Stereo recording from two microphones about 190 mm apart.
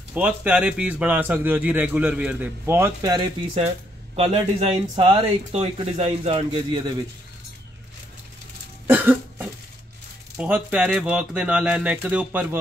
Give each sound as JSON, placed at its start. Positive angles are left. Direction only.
{"t": 0.1, "sound": "a man's voice", "side_deg": -5}
{"t": 3.5, "sound": "speech", "side_deg": -35}
{"t": 8.8, "sound": "cough", "side_deg": -10}
{"t": 10.3, "sound": "a man's voice", "side_deg": -5}